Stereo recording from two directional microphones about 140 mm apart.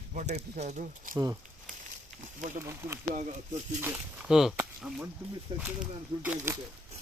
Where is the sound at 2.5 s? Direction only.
15° right (ahead or behind).